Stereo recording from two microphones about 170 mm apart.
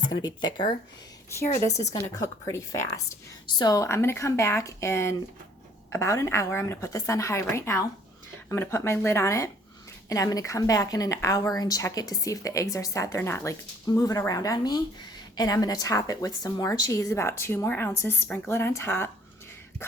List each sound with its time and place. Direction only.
0.0 s a woman's voice: 25° left (ahead or behind)